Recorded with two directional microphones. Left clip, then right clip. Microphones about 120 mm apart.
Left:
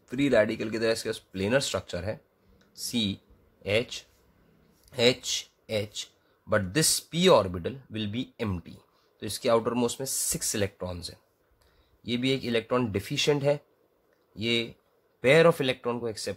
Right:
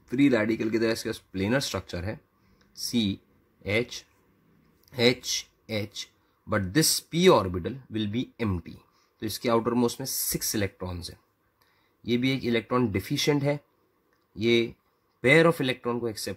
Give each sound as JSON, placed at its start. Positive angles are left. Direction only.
{"t": 0.0, "sound": "speech", "side_deg": -35}
{"t": 2.6, "sound": "a sound", "side_deg": 0}
{"t": 2.9, "sound": "speech", "side_deg": -35}
{"t": 12.0, "sound": "speech", "side_deg": -35}